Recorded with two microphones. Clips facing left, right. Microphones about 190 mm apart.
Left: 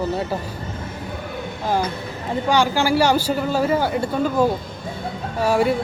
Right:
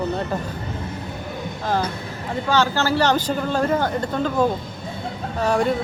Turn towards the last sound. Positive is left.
turn(degrees=10)  # may be behind; listen again after turning